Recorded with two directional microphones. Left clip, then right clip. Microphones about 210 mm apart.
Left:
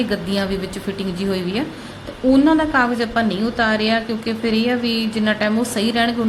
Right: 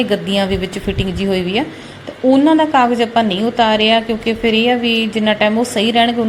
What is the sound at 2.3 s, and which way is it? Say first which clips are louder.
A woman's voice: right 4 dB; 5° right (ahead or behind).